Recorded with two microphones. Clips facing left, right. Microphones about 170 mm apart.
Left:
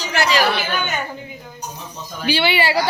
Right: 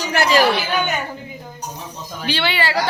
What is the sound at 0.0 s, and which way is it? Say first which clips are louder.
Speech: right 3 dB; 55° right (ahead or behind).